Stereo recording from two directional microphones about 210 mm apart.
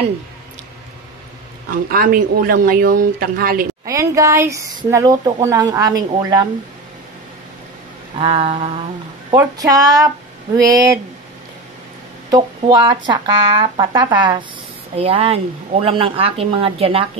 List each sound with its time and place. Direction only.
1.7 s speech: 45° right (ahead or behind)
3.8 s speech: 15° right (ahead or behind)
8.2 s speech: 25° right (ahead or behind)
12.3 s speech: 20° right (ahead or behind)